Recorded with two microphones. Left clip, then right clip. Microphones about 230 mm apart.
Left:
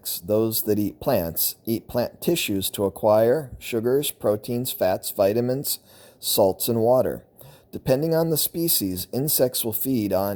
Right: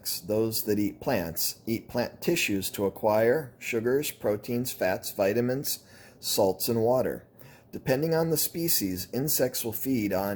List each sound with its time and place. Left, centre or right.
0.0 s speech: left